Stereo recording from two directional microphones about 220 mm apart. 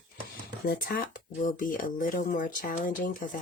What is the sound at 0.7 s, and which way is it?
Speech, 40° left (ahead or behind).